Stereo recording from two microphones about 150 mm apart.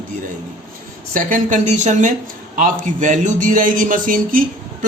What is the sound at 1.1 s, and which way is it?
A man's voice, 60° right (ahead or behind).